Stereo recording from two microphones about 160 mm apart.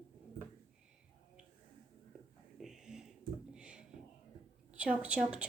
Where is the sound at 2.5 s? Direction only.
5° right (ahead or behind).